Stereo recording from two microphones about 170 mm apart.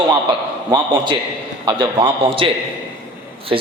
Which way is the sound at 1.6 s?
25° right (ahead or behind).